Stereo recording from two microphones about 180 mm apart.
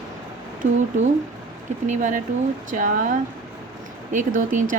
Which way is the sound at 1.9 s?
45° right (ahead or behind).